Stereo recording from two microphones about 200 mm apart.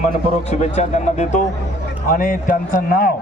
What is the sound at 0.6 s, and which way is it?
A man's voice, 35° left (ahead or behind).